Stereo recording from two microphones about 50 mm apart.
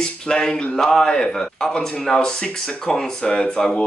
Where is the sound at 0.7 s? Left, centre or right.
Centre.